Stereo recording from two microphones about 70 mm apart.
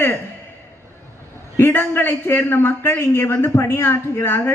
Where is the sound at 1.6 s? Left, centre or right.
Left.